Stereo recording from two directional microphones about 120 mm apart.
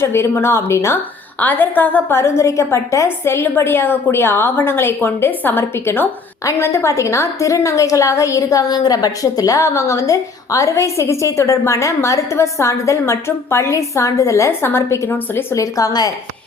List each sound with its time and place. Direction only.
0.0 s a woman's voice: 20° left (ahead or behind)